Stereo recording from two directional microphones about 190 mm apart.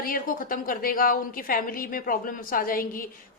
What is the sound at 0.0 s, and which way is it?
A woman's voice, 50° left (ahead or behind).